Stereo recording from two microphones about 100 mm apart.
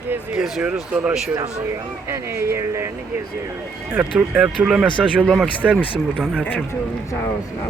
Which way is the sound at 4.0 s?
5° right (ahead or behind).